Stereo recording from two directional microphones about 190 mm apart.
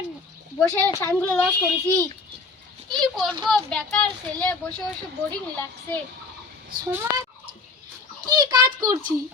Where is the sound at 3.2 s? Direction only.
25° right (ahead or behind).